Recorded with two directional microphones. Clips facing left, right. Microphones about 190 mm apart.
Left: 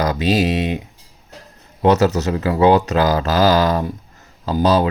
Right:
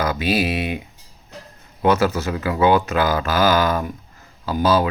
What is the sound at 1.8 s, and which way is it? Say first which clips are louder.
Speech: left 3 dB; 40° left (ahead or behind).